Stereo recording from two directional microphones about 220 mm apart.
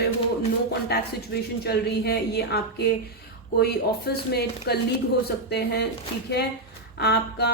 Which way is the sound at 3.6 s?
45° left (ahead or behind).